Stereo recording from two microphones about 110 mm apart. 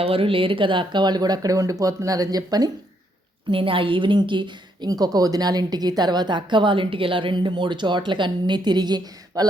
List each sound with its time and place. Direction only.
0.0 s speech: 60° right (ahead or behind); by 2.6 s 35° right (ahead or behind)
3.5 s a woman's voice: 55° right (ahead or behind); by 9.5 s 40° right (ahead or behind)